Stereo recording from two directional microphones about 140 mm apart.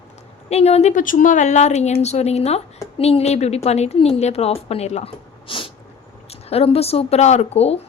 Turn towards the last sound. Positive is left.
turn(degrees=50)  # may be behind; listen again after turning